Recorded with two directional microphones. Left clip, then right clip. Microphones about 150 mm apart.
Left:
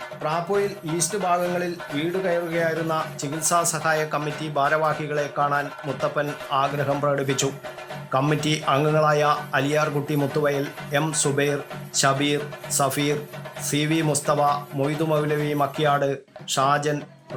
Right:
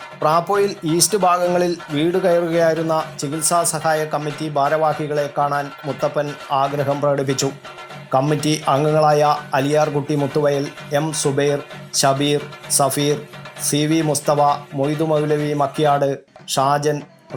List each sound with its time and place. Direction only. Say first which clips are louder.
0.2 s speech: right 8 dB; 45° right (ahead or behind)
3.2 s speech: right 4 dB; 15° right (ahead or behind)